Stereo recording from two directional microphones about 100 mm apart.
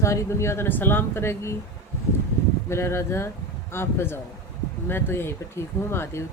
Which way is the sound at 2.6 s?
25° left (ahead or behind).